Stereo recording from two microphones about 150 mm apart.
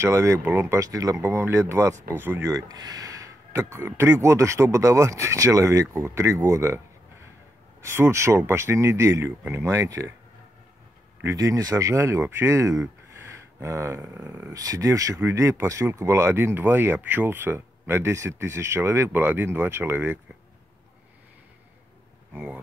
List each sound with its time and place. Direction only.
0.0 s speech: 20° right (ahead or behind)
7.8 s speech: 15° right (ahead or behind)
11.2 s speech: 20° right (ahead or behind)
22.3 s speech: 10° right (ahead or behind)